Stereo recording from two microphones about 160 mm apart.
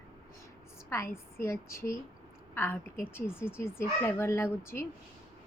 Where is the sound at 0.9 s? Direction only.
15° left (ahead or behind).